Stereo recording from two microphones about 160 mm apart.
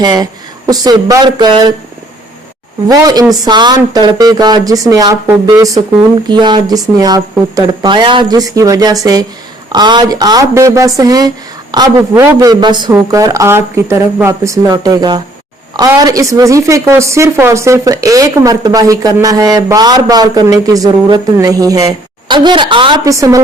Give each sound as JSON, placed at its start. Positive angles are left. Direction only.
{"t": 0.0, "sound": "speech", "side_deg": -25}
{"t": 2.8, "sound": "a woman's voice", "side_deg": -25}
{"t": 23.0, "sound": "speech", "side_deg": -20}